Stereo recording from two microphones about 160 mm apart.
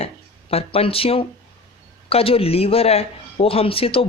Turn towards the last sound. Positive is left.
turn(degrees=35)  # may be behind; listen again after turning